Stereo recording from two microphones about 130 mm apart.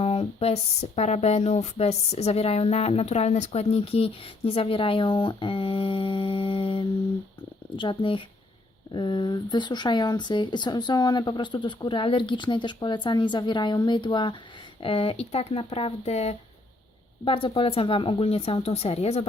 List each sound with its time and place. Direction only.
0.0 s a woman's voice: 50° left (ahead or behind)
17.2 s a woman's voice: 45° left (ahead or behind)